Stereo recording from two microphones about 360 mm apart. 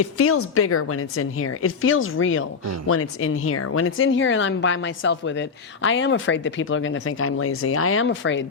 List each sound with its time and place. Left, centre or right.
0.0 s speech: left